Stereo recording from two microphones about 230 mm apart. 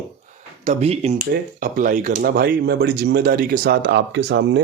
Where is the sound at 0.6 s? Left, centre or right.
Right.